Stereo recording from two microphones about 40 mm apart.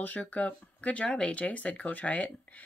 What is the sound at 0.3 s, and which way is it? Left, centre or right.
Speech, left.